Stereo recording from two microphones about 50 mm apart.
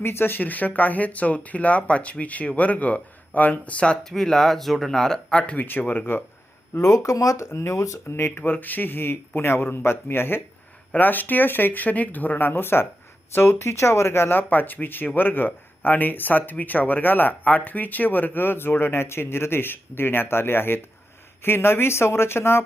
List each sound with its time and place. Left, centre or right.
0.0 s speech: left
4.0 s speech: centre
5.5 s speech: left
6.7 s speech: left
8.1 s speech: left